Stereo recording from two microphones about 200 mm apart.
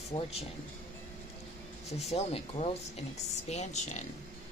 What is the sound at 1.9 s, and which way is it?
Speech, 35° left (ahead or behind).